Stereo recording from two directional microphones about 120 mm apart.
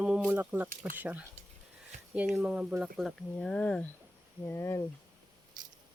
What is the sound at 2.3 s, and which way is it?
Speech, 10° right (ahead or behind).